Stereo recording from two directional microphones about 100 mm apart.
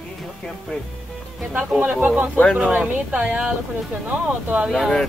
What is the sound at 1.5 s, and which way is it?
Speech, 15° right (ahead or behind).